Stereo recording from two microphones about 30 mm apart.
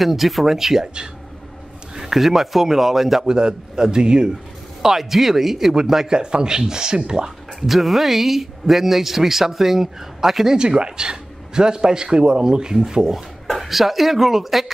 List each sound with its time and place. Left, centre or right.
0.0 s speech: centre
2.1 s speech: centre
3.3 s a man's voice: right
4.8 s speech: centre
6.0 s a man's voice: right
7.6 s speech: centre
10.5 s a man's voice: right
13.5 s speech: centre